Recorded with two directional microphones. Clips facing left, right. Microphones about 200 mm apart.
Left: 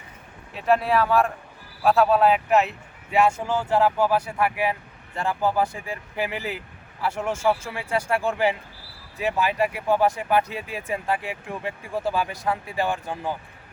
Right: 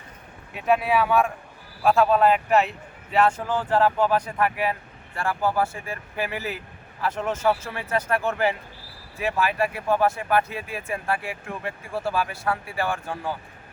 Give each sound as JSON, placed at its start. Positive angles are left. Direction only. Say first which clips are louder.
{"t": 0.5, "sound": "speech", "louder": "left 1 dB", "side_deg": 0}